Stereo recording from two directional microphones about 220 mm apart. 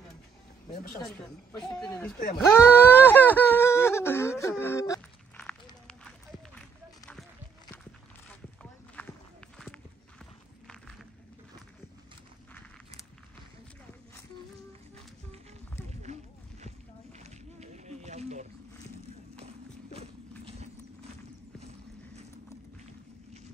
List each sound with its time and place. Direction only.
1.0 s a woman's voice: 5° left (ahead or behind)
2.4 s wail: 10° left (ahead or behind)
5.4 s walk: 5° left (ahead or behind)
9.0 s walk: 10° left (ahead or behind)
16.1 s a sound: 30° right (ahead or behind)
17.2 s rowboat: 30° right (ahead or behind)
19.4 s horse: 30° right (ahead or behind)